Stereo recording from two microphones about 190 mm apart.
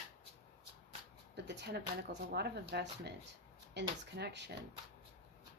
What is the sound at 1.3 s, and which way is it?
Speech, 65° right (ahead or behind).